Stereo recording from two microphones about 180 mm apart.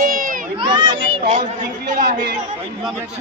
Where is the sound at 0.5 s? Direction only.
25° right (ahead or behind).